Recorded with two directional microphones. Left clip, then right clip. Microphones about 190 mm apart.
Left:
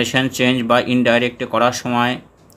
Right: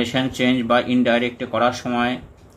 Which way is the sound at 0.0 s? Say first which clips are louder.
Left 4 dB; 35° left (ahead or behind).